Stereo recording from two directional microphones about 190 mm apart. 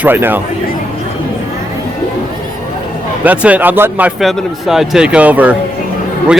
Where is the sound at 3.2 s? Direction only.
10° right (ahead or behind).